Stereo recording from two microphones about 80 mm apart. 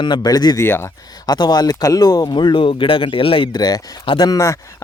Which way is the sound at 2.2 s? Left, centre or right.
Left.